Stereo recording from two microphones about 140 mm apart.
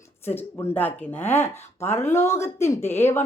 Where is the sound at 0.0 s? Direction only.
15° left (ahead or behind).